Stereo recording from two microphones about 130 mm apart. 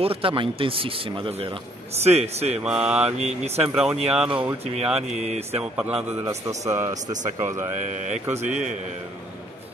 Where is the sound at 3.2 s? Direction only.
55° right (ahead or behind).